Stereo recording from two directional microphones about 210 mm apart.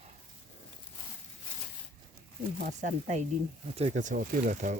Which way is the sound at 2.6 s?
35° right (ahead or behind).